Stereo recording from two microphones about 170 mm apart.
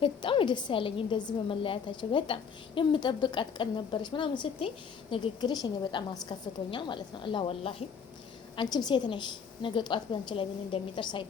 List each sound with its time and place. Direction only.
0.0 s a woman's voice: 30° left (ahead or behind)